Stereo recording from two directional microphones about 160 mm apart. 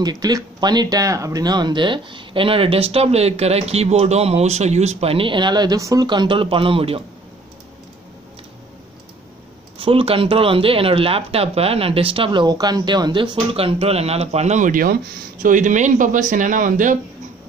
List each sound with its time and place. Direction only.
0.0 s speech: 25° right (ahead or behind)
9.8 s a man's voice: 35° right (ahead or behind); by 17.0 s 55° right (ahead or behind)